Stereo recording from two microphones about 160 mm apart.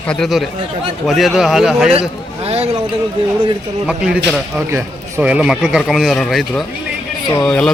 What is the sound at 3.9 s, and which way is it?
A man's voice, 5° right (ahead or behind).